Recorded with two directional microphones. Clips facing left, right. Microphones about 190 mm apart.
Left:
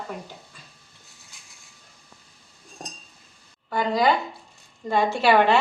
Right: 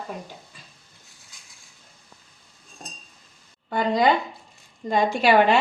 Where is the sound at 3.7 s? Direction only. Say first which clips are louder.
Right 1 dB; 20° right (ahead or behind).